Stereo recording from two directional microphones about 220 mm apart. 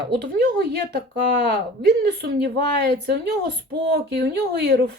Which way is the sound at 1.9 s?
45° right (ahead or behind).